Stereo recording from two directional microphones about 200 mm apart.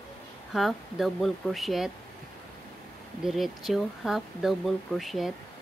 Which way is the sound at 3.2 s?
Centre (ahead or behind).